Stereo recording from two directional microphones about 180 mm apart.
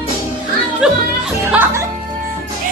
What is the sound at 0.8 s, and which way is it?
Music, 5° right (ahead or behind).